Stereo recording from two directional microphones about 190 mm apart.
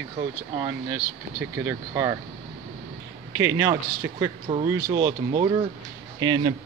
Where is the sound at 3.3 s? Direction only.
15° right (ahead or behind).